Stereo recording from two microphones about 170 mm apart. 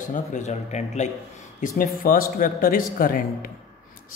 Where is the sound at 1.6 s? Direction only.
55° left (ahead or behind).